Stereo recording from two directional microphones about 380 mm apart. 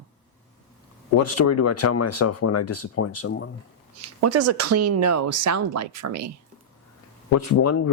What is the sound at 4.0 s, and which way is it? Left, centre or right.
Speech, right.